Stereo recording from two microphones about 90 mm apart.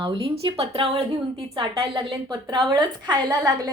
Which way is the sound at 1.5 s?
65° right (ahead or behind).